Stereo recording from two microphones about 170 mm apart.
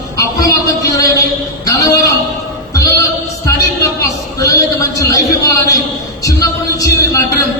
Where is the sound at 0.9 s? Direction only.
20° left (ahead or behind).